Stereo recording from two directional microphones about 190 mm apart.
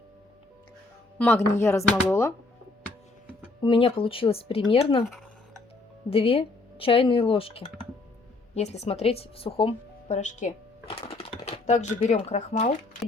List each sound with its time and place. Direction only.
1.2 s speech: 15° left (ahead or behind)
3.6 s speech: 25° left (ahead or behind)
6.1 s speech: 30° left (ahead or behind)